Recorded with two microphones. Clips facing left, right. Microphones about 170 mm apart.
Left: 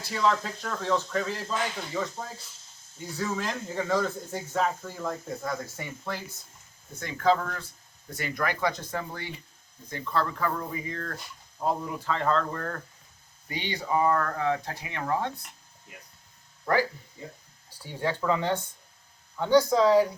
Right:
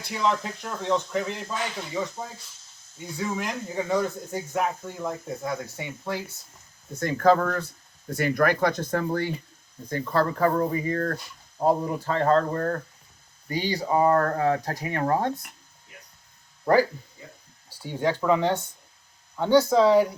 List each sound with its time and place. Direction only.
0.0 s speech: 20° right (ahead or behind)
7.0 s speech: 45° right (ahead or behind)
18.2 s speech: 20° right (ahead or behind)